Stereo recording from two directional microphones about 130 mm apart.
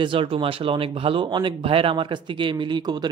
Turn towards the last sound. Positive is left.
turn(degrees=-35)  # may be behind; listen again after turning